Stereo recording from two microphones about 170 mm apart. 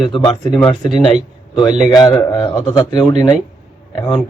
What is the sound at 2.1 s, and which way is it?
A man's voice, 25° left (ahead or behind).